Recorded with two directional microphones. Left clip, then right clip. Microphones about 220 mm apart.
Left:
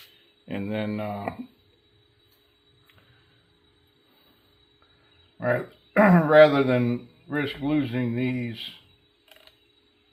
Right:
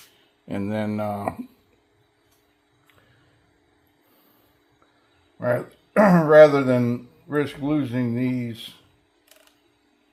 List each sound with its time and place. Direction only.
0.4 s speech: 25° right (ahead or behind)
5.4 s a man's voice: 30° right (ahead or behind)